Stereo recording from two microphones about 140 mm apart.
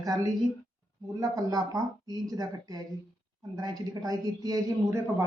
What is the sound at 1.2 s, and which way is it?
Speech, 25° right (ahead or behind).